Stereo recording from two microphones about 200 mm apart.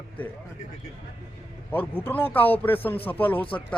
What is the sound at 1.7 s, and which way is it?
A man's voice, 10° left (ahead or behind).